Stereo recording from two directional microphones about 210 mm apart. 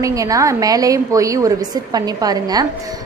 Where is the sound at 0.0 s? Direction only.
15° right (ahead or behind).